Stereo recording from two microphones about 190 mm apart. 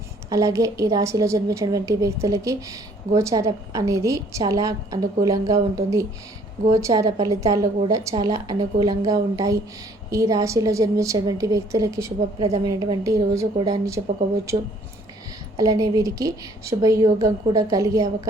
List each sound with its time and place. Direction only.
0.3 s a woman's voice: 15° right (ahead or behind)